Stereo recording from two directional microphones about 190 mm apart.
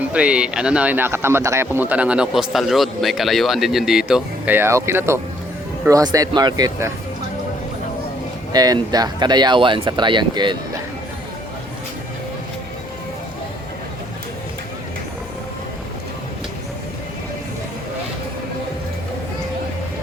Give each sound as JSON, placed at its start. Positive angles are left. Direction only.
{"t": 0.1, "sound": "speech", "side_deg": -5}
{"t": 8.5, "sound": "speech", "side_deg": -20}